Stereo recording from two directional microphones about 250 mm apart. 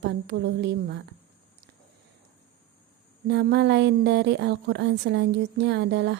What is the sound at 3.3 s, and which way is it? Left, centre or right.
A woman's voice, right.